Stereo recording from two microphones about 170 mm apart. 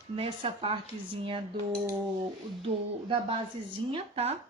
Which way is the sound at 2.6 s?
30° right (ahead or behind).